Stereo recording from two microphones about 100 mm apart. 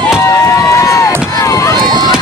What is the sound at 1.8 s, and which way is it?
Run, 45° right (ahead or behind).